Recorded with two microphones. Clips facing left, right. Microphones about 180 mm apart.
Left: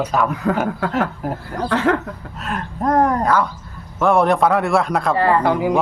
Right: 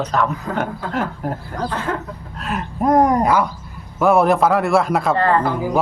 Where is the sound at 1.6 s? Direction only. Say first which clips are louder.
Left 7 dB; 75° left (ahead or behind).